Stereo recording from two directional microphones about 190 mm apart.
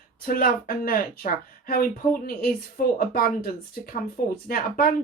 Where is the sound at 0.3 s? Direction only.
50° left (ahead or behind).